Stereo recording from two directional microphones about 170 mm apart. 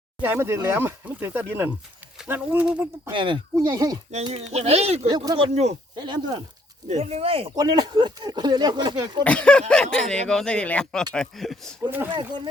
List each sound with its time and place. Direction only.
0.2 s speech: 15° right (ahead or behind)
3.1 s speech: 30° right (ahead or behind)
4.1 s speech: 35° right (ahead or behind)
5.1 s speech: 25° right (ahead or behind)
6.8 s speech: 40° right (ahead or behind)
7.5 s speech: 25° right (ahead or behind)
9.2 s speech: 5° left (ahead or behind)
11.8 s speech: 10° right (ahead or behind)